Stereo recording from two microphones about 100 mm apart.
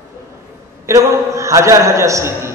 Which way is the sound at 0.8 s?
30° right (ahead or behind).